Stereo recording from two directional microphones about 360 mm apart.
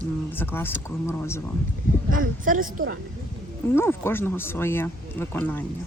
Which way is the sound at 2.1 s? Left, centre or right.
Right.